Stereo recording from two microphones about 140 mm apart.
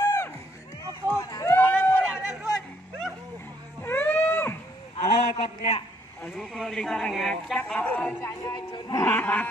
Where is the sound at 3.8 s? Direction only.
15° left (ahead or behind).